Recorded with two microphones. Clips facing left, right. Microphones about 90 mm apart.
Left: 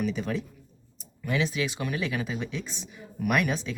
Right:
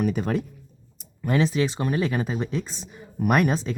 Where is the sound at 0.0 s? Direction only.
50° right (ahead or behind).